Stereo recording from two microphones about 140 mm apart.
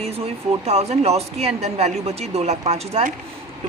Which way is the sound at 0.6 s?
50° right (ahead or behind).